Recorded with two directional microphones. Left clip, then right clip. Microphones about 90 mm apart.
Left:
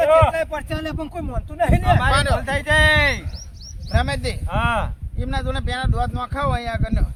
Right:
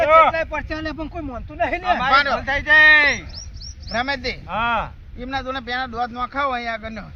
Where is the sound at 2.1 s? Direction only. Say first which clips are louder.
Right 3 dB; 50° left (ahead or behind).